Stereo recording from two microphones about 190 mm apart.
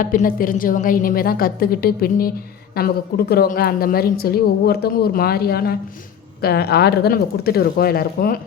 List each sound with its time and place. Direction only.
0.0 s a woman's voice: 45° left (ahead or behind)